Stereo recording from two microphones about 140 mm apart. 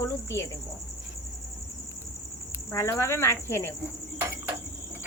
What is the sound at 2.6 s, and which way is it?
Speech, 20° left (ahead or behind).